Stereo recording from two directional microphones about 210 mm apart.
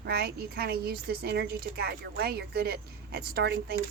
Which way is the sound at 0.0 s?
50° right (ahead or behind).